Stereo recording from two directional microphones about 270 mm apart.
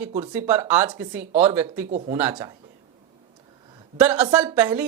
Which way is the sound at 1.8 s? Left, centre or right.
Right.